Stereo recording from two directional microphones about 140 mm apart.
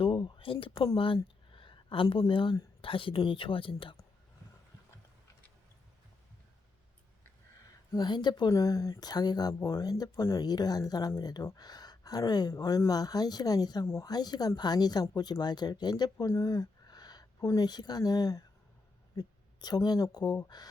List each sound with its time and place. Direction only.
0.0 s a sound: 35° left (ahead or behind)
0.9 s speech: 40° left (ahead or behind)
7.9 s speech: 30° left (ahead or behind)